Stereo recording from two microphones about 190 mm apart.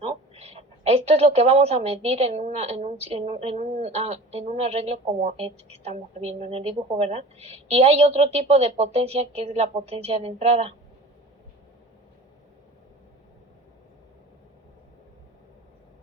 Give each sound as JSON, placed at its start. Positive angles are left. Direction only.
{"t": 0.0, "sound": "a woman's voice", "side_deg": -30}